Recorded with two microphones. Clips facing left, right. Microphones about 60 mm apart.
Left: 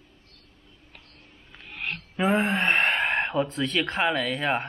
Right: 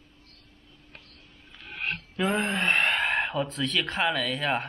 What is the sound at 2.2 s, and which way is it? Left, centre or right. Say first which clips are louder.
Speech: left 3 dB; centre.